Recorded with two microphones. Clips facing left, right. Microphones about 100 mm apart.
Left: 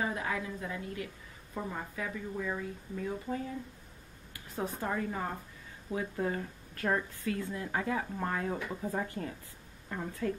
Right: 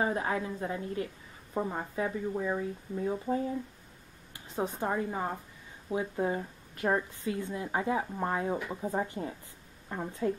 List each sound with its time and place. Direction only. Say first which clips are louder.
0.0 s a woman's voice: right 4 dB; 30° right (ahead or behind)